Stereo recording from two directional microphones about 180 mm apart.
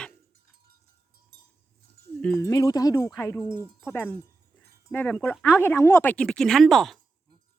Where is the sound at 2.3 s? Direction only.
20° left (ahead or behind); by 7.0 s centre (ahead or behind).